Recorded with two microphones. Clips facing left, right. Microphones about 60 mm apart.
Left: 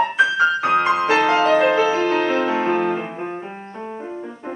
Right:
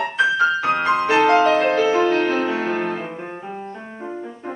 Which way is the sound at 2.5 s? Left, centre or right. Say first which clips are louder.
Left 3 dB; left.